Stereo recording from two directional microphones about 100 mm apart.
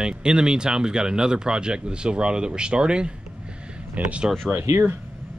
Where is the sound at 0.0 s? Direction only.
10° right (ahead or behind).